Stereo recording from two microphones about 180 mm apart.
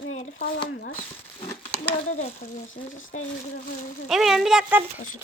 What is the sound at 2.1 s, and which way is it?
Speech, 40° left (ahead or behind).